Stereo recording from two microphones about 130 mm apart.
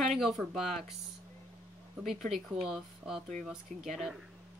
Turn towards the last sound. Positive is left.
turn(degrees=-5)  # may be behind; listen again after turning